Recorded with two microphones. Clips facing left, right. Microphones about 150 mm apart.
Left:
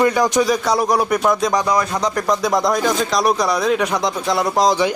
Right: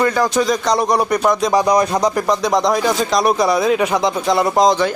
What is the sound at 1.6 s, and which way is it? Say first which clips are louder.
Speech: right 4 dB; 20° right (ahead or behind).